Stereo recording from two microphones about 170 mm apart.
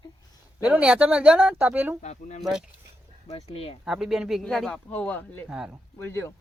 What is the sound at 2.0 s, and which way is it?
Speech, 45° left (ahead or behind).